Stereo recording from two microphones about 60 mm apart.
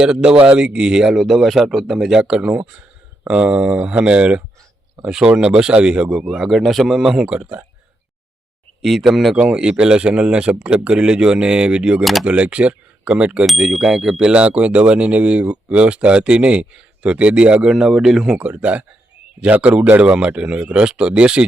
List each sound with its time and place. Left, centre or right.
0.0 s speech: centre
7.3 s speech: centre
8.8 s speech: centre
13.4 s speech: centre
17.7 s speech: centre
18.3 s speech: right